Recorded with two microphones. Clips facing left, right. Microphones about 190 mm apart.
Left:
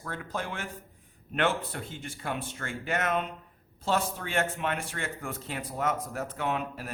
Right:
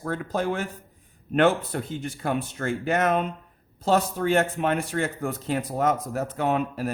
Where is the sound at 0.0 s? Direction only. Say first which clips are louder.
Right 9 dB; 40° right (ahead or behind).